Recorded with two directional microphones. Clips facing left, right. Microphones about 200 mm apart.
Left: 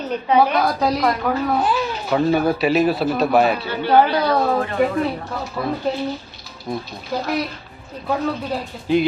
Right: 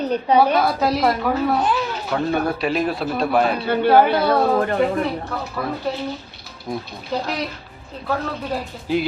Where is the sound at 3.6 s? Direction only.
55° right (ahead or behind).